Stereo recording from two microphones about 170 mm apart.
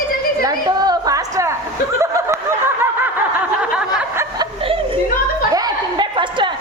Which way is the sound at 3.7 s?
5° right (ahead or behind).